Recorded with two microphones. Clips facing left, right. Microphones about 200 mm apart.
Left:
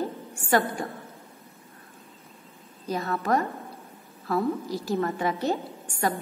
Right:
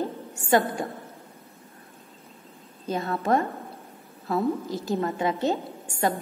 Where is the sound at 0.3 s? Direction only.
20° right (ahead or behind).